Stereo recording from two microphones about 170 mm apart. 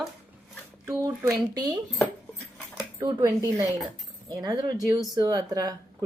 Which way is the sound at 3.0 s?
20° right (ahead or behind).